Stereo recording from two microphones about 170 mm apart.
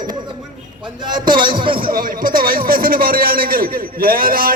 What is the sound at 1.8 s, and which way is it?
A man's voice, 60° right (ahead or behind).